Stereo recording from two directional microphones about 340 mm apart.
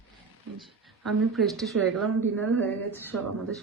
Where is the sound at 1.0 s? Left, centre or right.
Centre.